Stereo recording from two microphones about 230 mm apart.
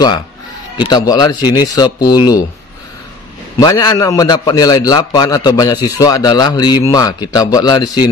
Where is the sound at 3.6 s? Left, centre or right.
Centre.